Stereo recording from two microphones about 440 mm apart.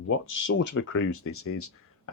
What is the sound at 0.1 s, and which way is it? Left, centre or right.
Speech, left.